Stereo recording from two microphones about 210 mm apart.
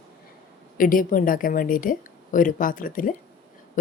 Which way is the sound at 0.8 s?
40° left (ahead or behind).